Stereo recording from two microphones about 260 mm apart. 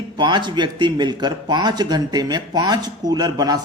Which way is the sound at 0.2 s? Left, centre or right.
Centre.